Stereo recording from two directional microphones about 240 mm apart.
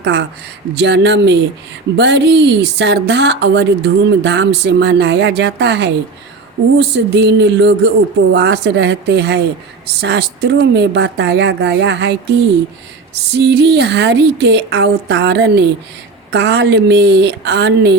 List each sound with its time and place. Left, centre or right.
0.0 s speech: right